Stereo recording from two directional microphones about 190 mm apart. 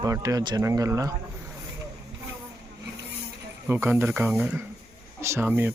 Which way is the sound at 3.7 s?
15° right (ahead or behind).